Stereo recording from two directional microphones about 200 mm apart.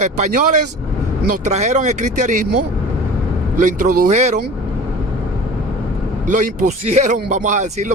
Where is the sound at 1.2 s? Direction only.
40° right (ahead or behind).